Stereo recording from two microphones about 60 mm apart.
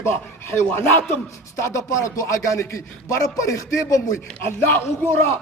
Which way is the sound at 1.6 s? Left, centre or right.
Left.